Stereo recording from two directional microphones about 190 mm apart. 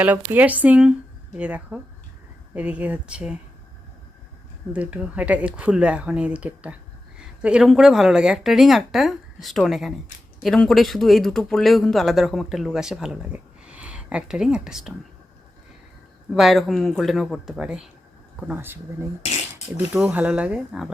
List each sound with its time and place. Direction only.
0.0 s speech: 10° right (ahead or behind)
4.7 s speech: 5° right (ahead or behind)
16.3 s speech: centre (ahead or behind)